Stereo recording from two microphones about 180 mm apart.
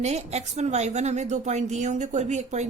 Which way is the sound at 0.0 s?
40° right (ahead or behind).